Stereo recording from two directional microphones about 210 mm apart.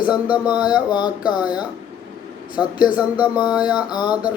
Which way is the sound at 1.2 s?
5° right (ahead or behind).